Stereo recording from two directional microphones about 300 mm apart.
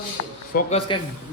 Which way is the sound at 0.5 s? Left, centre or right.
Centre.